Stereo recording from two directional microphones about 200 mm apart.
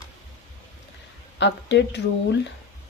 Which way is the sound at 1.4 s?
60° left (ahead or behind).